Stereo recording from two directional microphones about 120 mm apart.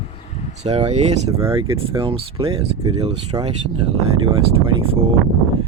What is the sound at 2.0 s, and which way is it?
Speech, 50° right (ahead or behind).